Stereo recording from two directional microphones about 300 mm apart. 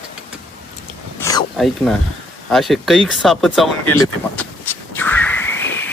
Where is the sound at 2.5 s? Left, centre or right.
Centre.